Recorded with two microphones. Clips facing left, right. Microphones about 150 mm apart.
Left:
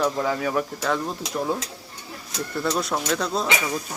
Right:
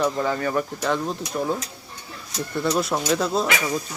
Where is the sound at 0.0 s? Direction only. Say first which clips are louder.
Right 1 dB; centre (ahead or behind).